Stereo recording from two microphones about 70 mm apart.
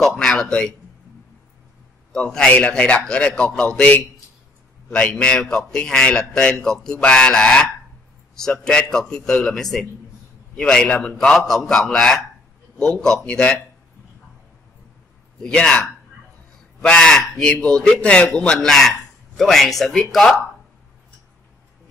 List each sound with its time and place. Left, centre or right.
0.0 s a man's voice: centre
2.5 s a man's voice: centre
4.9 s a man's voice: centre
15.4 s a man's voice: centre
16.8 s a man's voice: centre